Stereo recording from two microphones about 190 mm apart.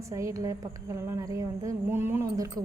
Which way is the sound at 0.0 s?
15° right (ahead or behind).